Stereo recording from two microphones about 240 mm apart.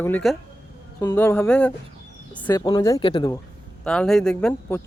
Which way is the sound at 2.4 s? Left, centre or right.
Centre.